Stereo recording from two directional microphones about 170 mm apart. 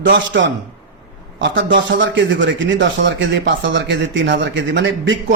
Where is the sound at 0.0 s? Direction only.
90° right.